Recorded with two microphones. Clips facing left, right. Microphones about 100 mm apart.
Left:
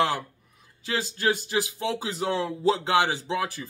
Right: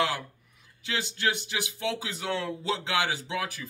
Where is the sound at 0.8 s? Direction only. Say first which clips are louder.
Left 4 dB; 35° left (ahead or behind).